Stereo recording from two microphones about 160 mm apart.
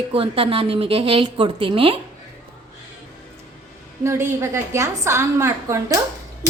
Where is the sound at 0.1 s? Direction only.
35° right (ahead or behind).